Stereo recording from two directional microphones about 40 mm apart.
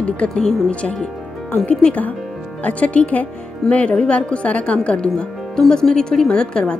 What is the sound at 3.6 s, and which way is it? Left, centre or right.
Speech, centre.